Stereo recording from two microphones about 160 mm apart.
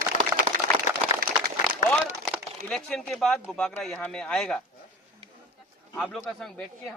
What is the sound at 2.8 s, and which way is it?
Speech, 5° left (ahead or behind).